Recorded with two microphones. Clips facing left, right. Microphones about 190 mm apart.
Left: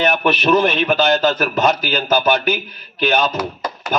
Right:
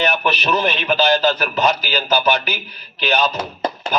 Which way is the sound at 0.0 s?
50° left (ahead or behind).